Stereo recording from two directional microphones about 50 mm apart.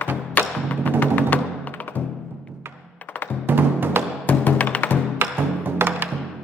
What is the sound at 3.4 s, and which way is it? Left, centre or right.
Music, right.